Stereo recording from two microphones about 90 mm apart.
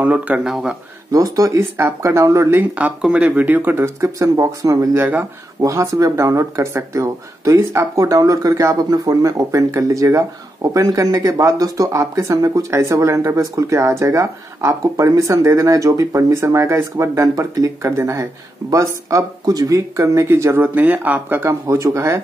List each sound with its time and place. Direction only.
0.0 s speech: 15° right (ahead or behind)
0.5 s speech: 5° right (ahead or behind)
1.1 s speech: 40° right (ahead or behind)
1.6 s speech: 30° right (ahead or behind)
2.7 s speech: 15° right (ahead or behind)
3.8 s speech: 35° right (ahead or behind)